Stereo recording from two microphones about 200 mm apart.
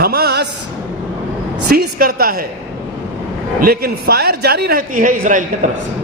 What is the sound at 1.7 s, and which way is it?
Speech, 50° right (ahead or behind).